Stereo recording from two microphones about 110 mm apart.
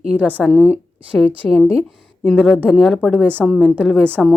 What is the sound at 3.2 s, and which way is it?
Speech, 15° right (ahead or behind).